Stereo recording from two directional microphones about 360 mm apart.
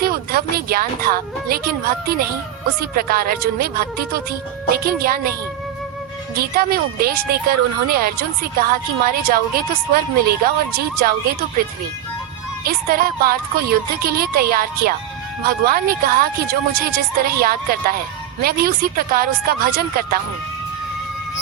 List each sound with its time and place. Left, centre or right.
0.0 s speech: right
6.3 s speech: right
12.6 s speech: right